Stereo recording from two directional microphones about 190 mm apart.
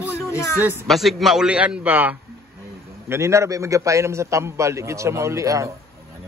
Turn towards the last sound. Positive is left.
turn(degrees=-15)  # may be behind; listen again after turning